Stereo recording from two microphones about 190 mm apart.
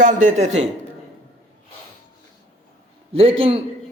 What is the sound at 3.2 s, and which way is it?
Speech, 30° right (ahead or behind).